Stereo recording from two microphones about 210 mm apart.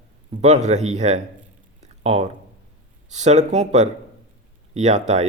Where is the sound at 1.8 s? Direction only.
30° right (ahead or behind).